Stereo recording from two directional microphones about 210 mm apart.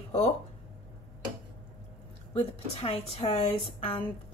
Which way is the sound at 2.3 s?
25° left (ahead or behind).